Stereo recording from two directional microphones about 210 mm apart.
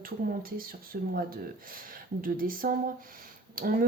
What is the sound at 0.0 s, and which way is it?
Speech, 45° right (ahead or behind).